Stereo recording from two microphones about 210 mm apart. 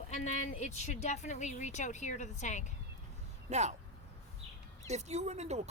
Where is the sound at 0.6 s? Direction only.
35° left (ahead or behind).